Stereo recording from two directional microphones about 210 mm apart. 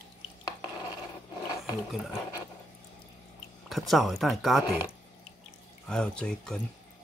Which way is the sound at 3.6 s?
Centre (ahead or behind).